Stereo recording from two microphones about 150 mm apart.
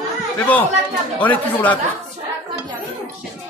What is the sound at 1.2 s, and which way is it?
Speech, 10° left (ahead or behind).